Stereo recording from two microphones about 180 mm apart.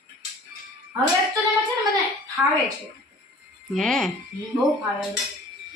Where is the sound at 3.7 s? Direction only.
Centre (ahead or behind).